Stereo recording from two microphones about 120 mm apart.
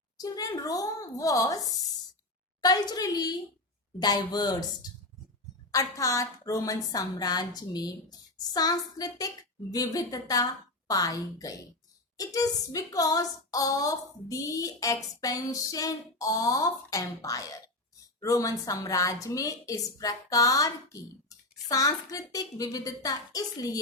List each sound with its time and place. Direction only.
0.2 s a woman's voice: 30° left (ahead or behind)
2.6 s a woman's voice: 35° left (ahead or behind)